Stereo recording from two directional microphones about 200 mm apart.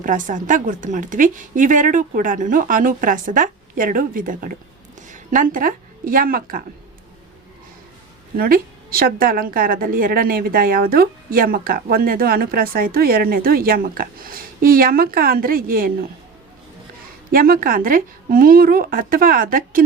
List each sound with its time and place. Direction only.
0.0 s a woman's voice: 40° right (ahead or behind)
8.4 s a woman's voice: 45° right (ahead or behind)
17.3 s a woman's voice: 45° right (ahead or behind)